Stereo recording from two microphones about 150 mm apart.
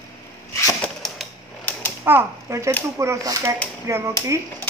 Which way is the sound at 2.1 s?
15° right (ahead or behind).